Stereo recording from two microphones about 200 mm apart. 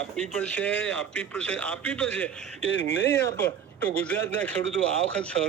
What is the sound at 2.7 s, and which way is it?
Speech, 60° left (ahead or behind).